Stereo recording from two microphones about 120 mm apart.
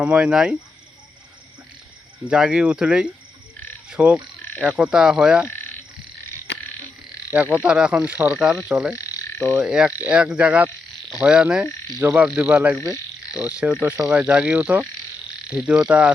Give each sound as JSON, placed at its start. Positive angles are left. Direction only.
{"t": 0.0, "sound": "speech", "side_deg": -10}
{"t": 2.2, "sound": "speech", "side_deg": -5}
{"t": 5.5, "sound": "frog", "side_deg": 15}
{"t": 7.3, "sound": "speech", "side_deg": -10}
{"t": 9.0, "sound": "frog", "side_deg": 25}
{"t": 9.6, "sound": "speech", "side_deg": -10}